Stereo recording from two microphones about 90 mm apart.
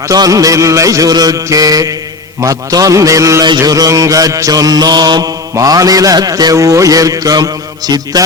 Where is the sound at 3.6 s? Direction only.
40° right (ahead or behind).